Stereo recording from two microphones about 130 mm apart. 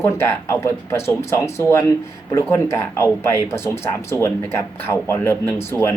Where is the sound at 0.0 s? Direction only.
20° left (ahead or behind).